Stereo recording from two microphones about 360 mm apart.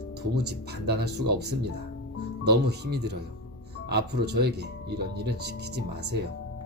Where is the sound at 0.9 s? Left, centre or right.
Right.